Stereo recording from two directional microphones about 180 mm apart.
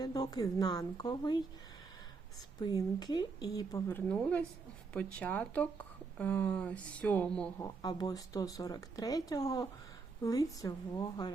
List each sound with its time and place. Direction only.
0.0 s speech: 20° left (ahead or behind)
2.6 s speech: 20° left (ahead or behind)
7.6 s speech: 20° left (ahead or behind)